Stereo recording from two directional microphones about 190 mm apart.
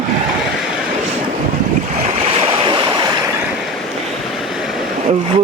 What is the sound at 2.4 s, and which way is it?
Waves, 30° right (ahead or behind).